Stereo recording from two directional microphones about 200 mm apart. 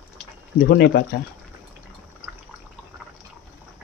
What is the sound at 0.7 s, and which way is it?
Speech, 55° left (ahead or behind).